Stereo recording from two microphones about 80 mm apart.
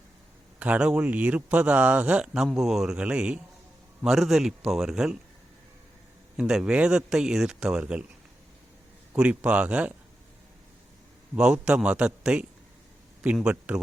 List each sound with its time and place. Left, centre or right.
0.6 s speech: centre
6.4 s speech: centre
9.1 s speech: centre
11.3 s speech: centre